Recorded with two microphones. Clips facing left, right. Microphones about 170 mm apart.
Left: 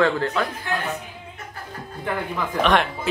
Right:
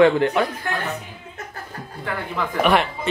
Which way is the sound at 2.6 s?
5° right (ahead or behind).